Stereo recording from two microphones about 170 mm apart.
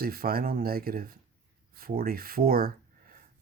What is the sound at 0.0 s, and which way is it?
Speech, 60° right (ahead or behind).